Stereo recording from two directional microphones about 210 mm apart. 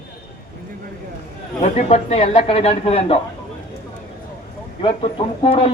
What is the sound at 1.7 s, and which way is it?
A woman's voice, 30° left (ahead or behind).